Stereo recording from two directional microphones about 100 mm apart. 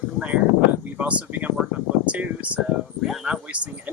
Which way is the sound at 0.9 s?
15° right (ahead or behind).